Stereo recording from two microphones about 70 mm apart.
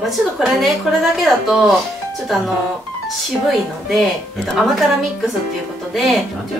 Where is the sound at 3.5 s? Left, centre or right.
Centre.